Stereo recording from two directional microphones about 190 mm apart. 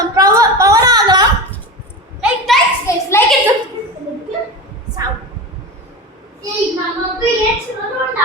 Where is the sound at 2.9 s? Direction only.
15° left (ahead or behind).